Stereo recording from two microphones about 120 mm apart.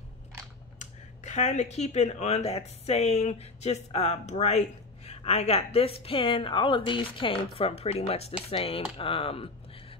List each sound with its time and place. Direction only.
0.7 s speech: 80° left; by 9.5 s 50° left (ahead or behind)